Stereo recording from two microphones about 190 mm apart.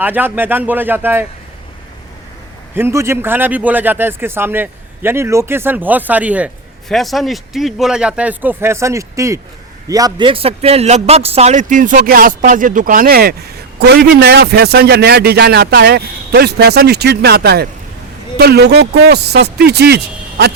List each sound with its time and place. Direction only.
0.0 s a man's voice: 10° right (ahead or behind)
2.7 s a man's voice: 15° right (ahead or behind); by 20.0 s 60° right (ahead or behind)